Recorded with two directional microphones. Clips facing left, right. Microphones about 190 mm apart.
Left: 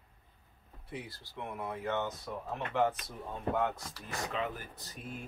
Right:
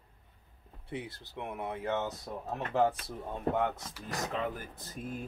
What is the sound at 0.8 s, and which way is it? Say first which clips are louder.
Speech: right 4 dB; 25° right (ahead or behind).